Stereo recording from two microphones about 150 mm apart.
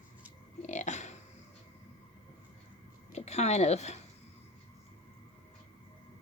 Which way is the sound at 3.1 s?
45° left (ahead or behind).